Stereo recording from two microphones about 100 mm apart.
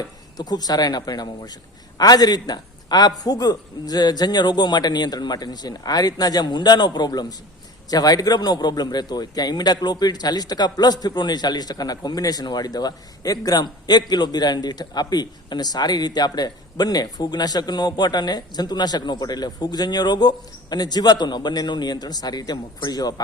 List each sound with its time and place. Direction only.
0.3 s speech: 40° left (ahead or behind)